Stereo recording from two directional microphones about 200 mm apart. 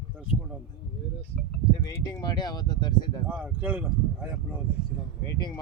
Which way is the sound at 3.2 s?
5° right (ahead or behind).